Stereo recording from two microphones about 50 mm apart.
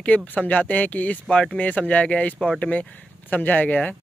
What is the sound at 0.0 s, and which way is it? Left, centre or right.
Speech, left.